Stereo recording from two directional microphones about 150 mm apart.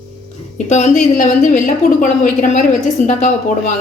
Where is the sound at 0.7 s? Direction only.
50° left (ahead or behind).